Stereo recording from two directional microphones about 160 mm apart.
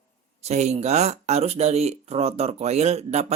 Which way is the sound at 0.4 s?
45° right (ahead or behind).